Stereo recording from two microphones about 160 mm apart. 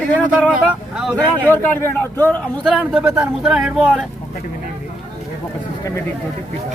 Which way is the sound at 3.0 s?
10° right (ahead or behind).